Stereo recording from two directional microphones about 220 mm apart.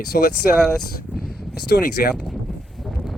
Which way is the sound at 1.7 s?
45° left (ahead or behind).